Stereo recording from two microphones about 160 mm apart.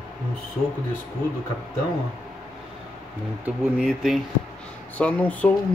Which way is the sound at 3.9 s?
Centre (ahead or behind).